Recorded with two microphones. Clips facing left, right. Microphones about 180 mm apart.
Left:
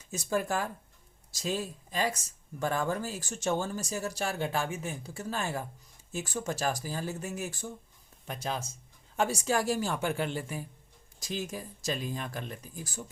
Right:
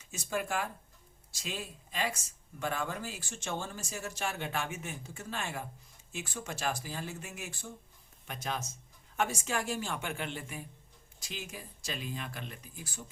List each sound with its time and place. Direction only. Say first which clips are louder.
0.1 s speech: left 4 dB; 40° left (ahead or behind)